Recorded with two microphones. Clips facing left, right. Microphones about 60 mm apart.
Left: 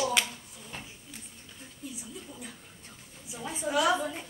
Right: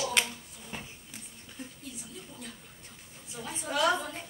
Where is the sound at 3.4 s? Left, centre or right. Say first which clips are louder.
Left 2 dB; centre.